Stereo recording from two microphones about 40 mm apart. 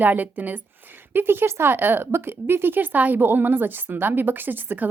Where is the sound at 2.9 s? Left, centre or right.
Right.